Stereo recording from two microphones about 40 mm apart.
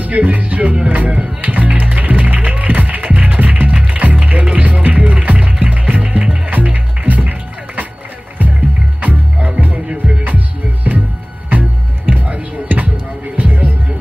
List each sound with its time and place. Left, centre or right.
0.0 s speech: right
0.8 s music: right
9.0 s music: right
12.1 s music: right